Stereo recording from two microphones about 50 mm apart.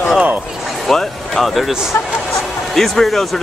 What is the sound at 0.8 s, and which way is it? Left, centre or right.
Speech, centre.